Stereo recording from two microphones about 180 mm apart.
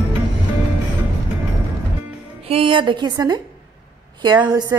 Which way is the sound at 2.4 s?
35° right (ahead or behind).